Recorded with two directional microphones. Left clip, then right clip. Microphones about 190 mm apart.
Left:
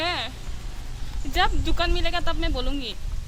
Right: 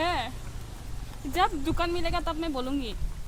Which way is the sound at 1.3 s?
60° right (ahead or behind).